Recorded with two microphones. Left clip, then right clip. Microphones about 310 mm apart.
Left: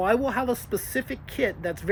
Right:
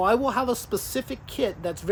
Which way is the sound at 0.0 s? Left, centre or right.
Centre.